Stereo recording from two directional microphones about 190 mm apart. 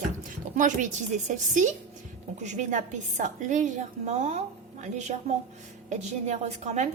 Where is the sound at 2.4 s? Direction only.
40° right (ahead or behind).